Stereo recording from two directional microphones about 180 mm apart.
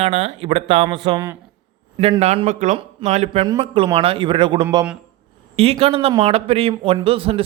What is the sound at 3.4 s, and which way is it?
Speech, 25° right (ahead or behind).